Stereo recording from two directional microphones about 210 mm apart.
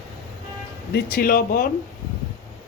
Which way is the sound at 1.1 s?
45° left (ahead or behind).